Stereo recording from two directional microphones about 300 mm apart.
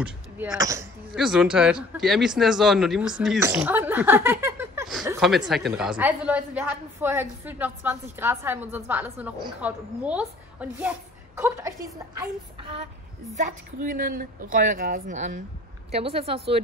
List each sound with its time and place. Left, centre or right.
0.0 s a woman's voice: centre
13.4 s a woman's voice: right